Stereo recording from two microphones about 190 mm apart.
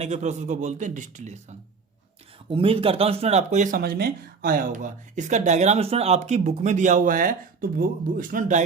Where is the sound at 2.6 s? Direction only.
30° right (ahead or behind).